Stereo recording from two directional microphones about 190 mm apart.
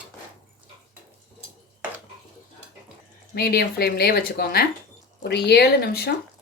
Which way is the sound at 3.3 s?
55° left (ahead or behind).